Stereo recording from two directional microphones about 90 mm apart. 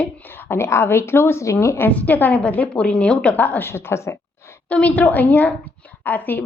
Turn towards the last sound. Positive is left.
turn(degrees=20)  # may be behind; listen again after turning